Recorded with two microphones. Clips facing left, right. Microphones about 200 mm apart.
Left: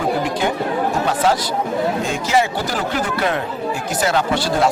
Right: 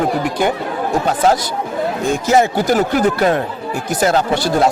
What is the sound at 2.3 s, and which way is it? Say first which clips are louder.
Speech: right 6 dB; 45° right (ahead or behind).